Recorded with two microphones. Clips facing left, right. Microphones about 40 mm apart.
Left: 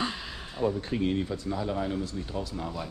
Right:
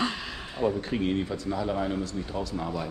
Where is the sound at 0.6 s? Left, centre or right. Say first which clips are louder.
Right 1 dB; right.